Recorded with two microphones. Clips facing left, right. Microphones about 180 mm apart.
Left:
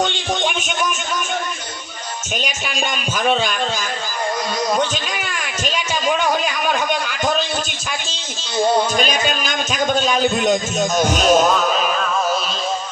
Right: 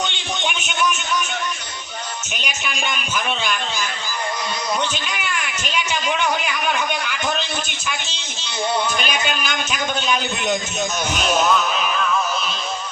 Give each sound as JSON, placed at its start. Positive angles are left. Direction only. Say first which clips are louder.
{"t": 0.0, "sound": "music", "louder": "left 5 dB", "side_deg": 45}
{"t": 2.4, "sound": "music", "louder": "left 2 dB", "side_deg": 45}
{"t": 4.8, "sound": "speech", "louder": "left 4 dB", "side_deg": 45}
{"t": 7.9, "sound": "music", "louder": "left 1 dB", "side_deg": 45}